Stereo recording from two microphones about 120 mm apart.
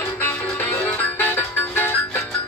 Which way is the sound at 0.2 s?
15° left (ahead or behind).